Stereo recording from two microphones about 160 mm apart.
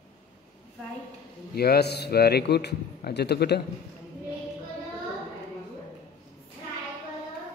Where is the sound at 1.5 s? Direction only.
75° left (ahead or behind).